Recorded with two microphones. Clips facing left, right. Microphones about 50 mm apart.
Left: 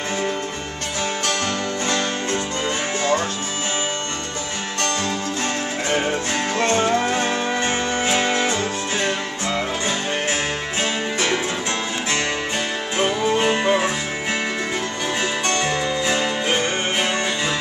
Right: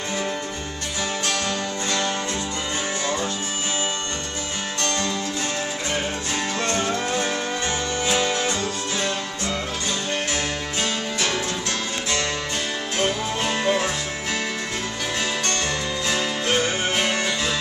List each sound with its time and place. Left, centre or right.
3.0 s music: left
6.5 s music: left
12.9 s music: centre
15.4 s music: centre